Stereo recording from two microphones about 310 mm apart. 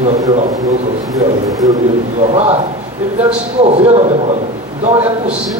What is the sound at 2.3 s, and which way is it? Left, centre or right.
Speech, centre.